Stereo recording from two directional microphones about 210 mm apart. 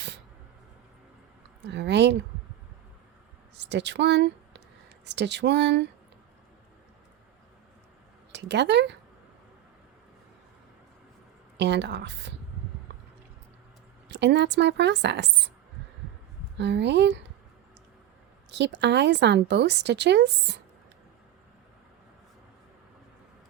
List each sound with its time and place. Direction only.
1.6 s a woman's voice: 55° right (ahead or behind)
3.5 s a woman's voice: 55° right (ahead or behind)
8.3 s speech: 55° right (ahead or behind)
11.5 s a woman's voice: 55° right (ahead or behind)
14.1 s a woman's voice: 55° right (ahead or behind)
16.6 s a woman's voice: 55° right (ahead or behind)
18.5 s a woman's voice: 55° right (ahead or behind)